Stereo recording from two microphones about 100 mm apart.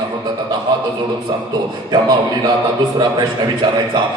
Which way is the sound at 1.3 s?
45° right (ahead or behind).